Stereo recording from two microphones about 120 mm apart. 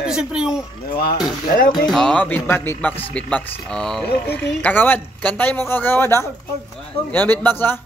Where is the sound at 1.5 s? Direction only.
90° left.